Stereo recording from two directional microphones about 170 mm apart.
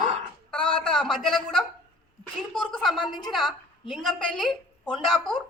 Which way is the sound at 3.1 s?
25° left (ahead or behind).